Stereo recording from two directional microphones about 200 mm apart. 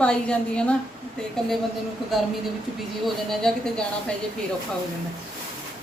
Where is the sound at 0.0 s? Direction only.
5° left (ahead or behind).